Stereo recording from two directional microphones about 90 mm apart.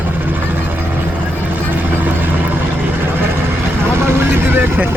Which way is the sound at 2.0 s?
20° right (ahead or behind).